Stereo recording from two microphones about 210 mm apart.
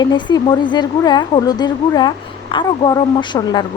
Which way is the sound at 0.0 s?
20° left (ahead or behind).